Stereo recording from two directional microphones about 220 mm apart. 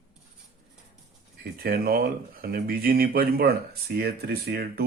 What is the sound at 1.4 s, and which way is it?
Speech, 45° right (ahead or behind).